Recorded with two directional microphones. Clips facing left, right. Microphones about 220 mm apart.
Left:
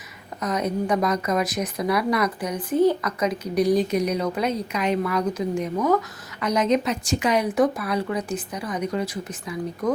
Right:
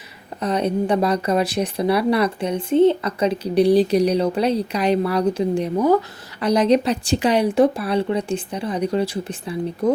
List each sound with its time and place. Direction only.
0.4 s speech: 30° right (ahead or behind)